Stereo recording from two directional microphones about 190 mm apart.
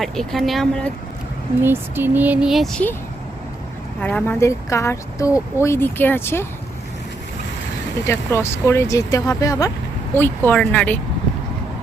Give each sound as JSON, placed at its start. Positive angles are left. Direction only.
{"t": 0.0, "sound": "speech", "side_deg": 0}
{"t": 1.6, "sound": "speech", "side_deg": -10}
{"t": 4.0, "sound": "speech", "side_deg": 10}
{"t": 8.0, "sound": "speech", "side_deg": 15}